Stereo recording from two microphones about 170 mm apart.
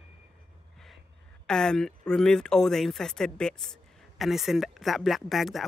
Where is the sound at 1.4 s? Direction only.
5° left (ahead or behind).